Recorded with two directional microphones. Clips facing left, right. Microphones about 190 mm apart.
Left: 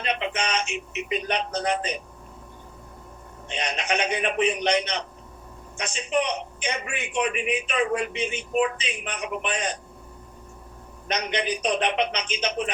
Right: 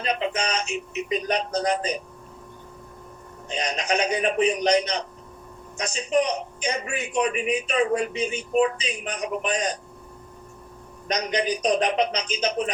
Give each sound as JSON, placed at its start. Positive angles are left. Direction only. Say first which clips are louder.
{"t": 0.0, "sound": "a sound", "louder": "right 2 dB", "side_deg": -35}
{"t": 3.5, "sound": "a man's voice", "louder": "right 2 dB", "side_deg": -35}
{"t": 11.1, "sound": "a man's voice", "louder": "right 2 dB", "side_deg": -35}